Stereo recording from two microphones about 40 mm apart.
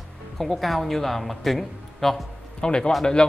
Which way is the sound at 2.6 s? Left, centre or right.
Left.